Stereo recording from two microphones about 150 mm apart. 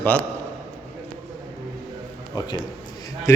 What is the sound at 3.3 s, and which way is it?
Speech, 20° left (ahead or behind).